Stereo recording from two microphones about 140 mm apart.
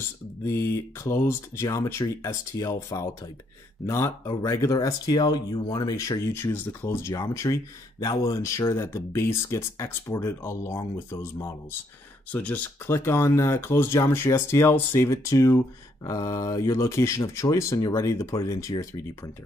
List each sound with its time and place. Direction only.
0.5 s speech: 20° left (ahead or behind)
12.3 s speech: 10° left (ahead or behind)